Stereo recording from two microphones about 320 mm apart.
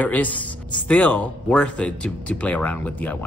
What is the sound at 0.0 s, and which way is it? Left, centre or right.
Speech, centre.